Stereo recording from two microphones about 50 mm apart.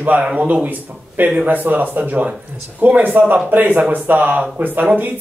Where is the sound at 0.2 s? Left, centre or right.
Right.